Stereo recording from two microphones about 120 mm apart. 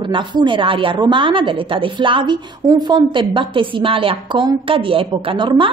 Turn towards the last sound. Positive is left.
turn(degrees=-45)  # may be behind; listen again after turning